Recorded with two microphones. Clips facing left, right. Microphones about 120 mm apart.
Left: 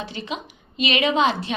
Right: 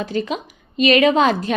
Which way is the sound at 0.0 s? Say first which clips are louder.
Right 8 dB; 45° right (ahead or behind).